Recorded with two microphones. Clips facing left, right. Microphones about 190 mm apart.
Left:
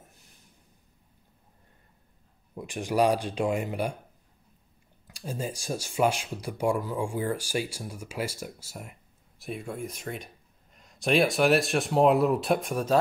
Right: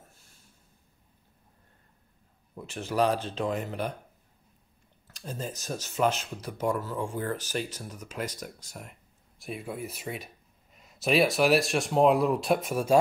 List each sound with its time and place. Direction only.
0.0 s a sound: 15° left (ahead or behind)
2.5 s speech: 15° left (ahead or behind)
5.0 s speech: 10° left (ahead or behind); by 13.0 s 10° right (ahead or behind)